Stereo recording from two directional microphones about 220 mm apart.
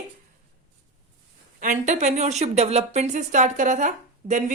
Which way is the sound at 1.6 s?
35° right (ahead or behind).